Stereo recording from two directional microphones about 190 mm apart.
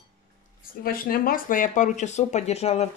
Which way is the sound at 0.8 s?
50° left (ahead or behind).